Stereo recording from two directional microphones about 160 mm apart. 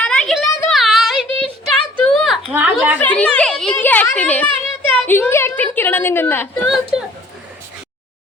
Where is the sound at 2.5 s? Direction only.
10° right (ahead or behind).